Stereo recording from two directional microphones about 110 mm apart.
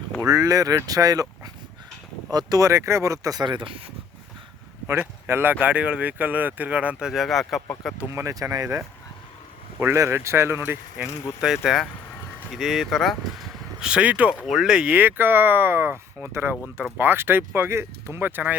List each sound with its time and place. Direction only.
0.3 s speech: 30° right (ahead or behind)
2.3 s speech: 35° right (ahead or behind)
4.9 s speech: 20° right (ahead or behind)
7.1 s speech: centre (ahead or behind)
8.1 s speech: 30° right (ahead or behind)
9.8 s speech: 25° right (ahead or behind)
11.3 s speech: 5° right (ahead or behind)
13.7 s speech: 10° right (ahead or behind)